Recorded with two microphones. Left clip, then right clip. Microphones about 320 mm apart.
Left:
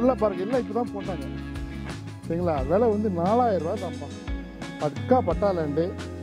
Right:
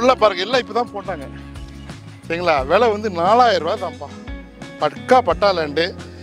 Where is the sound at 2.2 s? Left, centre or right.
Centre.